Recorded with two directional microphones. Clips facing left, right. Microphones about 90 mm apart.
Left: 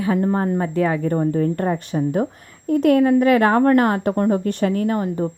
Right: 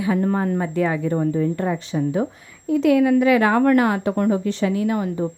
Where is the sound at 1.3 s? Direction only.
50° left (ahead or behind).